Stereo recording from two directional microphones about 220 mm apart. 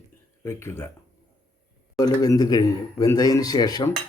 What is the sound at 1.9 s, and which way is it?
Speech, 15° left (ahead or behind).